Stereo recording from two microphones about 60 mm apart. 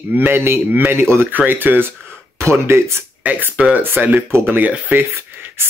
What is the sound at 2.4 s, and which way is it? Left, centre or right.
Speech, right.